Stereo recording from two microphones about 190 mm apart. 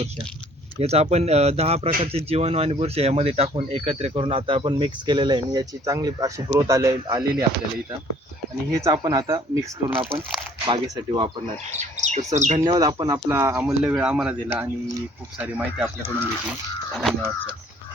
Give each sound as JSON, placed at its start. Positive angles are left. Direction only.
{"t": 0.8, "sound": "speech", "side_deg": -35}
{"t": 8.7, "sound": "speech", "side_deg": -20}
{"t": 11.7, "sound": "speech", "side_deg": -35}
{"t": 12.6, "sound": "speech", "side_deg": -25}
{"t": 15.8, "sound": "speech", "side_deg": 10}
{"t": 16.5, "sound": "a sound", "side_deg": 0}